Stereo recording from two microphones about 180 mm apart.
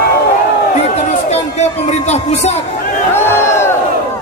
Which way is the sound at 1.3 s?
35° left (ahead or behind).